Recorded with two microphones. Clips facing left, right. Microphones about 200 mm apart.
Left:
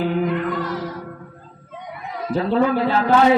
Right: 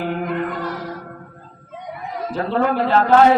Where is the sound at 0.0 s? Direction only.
55° right (ahead or behind).